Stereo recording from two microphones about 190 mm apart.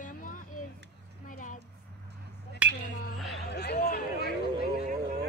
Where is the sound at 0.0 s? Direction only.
45° left (ahead or behind).